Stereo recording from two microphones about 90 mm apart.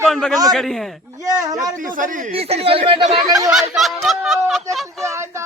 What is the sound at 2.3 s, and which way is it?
Speech, 90° right.